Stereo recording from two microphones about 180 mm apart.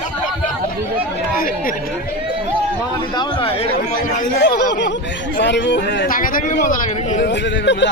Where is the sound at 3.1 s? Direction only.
25° left (ahead or behind).